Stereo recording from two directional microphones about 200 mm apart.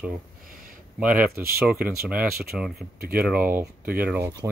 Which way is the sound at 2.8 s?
50° right (ahead or behind).